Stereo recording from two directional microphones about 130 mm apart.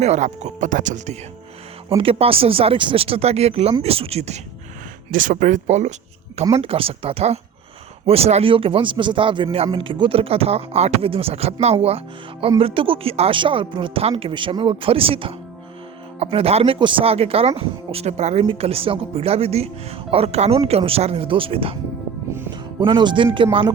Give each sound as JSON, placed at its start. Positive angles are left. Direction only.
{"t": 0.0, "sound": "speech", "side_deg": -60}
{"t": 2.0, "sound": "speech", "side_deg": -45}
{"t": 5.1, "sound": "speech", "side_deg": -90}
{"t": 6.6, "sound": "speech", "side_deg": -45}
{"t": 22.8, "sound": "speech", "side_deg": -35}